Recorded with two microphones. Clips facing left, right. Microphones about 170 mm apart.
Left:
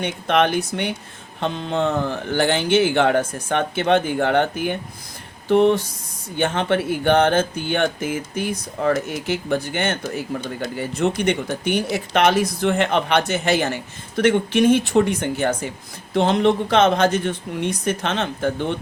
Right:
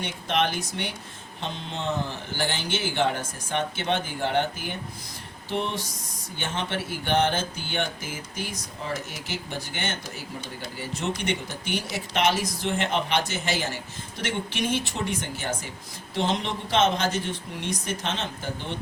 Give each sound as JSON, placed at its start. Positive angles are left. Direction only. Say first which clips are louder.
{"t": 0.0, "sound": "speech", "louder": "left 7 dB", "side_deg": 60}